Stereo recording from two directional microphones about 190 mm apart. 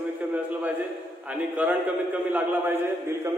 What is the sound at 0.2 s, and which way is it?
A man's voice, 10° right (ahead or behind).